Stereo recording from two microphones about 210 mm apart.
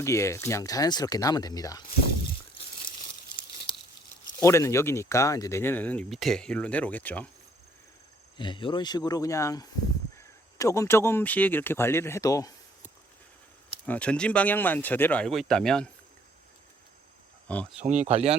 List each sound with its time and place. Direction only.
0.0 s speech: 15° left (ahead or behind)
3.3 s crumpling: 25° left (ahead or behind)
4.4 s speech: 15° left (ahead or behind)
8.4 s speech: 20° left (ahead or behind)
13.8 s speech: 5° left (ahead or behind)
17.5 s speech: 5° left (ahead or behind)
17.8 s speech: 30° right (ahead or behind)